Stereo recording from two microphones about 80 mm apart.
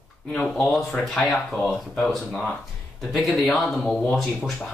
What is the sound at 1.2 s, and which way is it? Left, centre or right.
Speech, centre.